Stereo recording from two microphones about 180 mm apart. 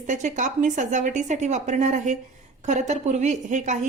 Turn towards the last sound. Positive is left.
turn(degrees=-45)  # may be behind; listen again after turning